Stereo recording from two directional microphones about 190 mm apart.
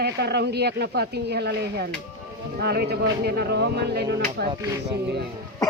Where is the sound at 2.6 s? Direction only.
55° right (ahead or behind).